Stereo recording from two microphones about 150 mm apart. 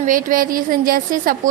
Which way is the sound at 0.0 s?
65° right (ahead or behind).